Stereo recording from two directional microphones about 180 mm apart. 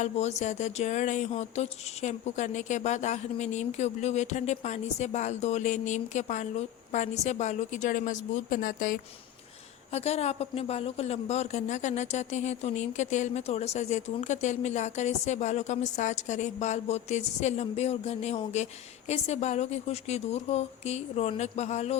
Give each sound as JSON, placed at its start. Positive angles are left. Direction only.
{"t": 0.0, "sound": "a woman's voice", "side_deg": 40}
{"t": 9.9, "sound": "a woman's voice", "side_deg": 35}